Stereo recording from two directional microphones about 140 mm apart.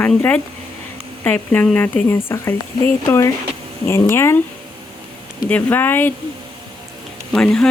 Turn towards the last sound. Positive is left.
turn(degrees=5)  # may be behind; listen again after turning